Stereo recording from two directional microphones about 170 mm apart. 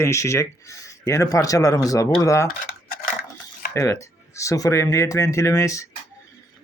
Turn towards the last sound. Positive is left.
turn(degrees=20)  # may be behind; listen again after turning